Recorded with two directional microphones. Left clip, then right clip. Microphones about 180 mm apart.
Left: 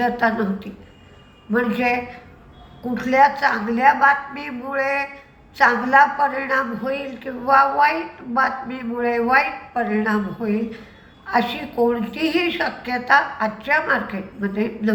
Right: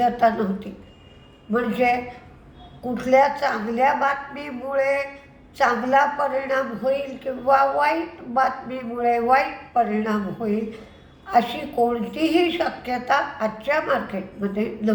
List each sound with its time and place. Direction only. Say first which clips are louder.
0.0 s a man's voice: right 1 dB; 15° right (ahead or behind)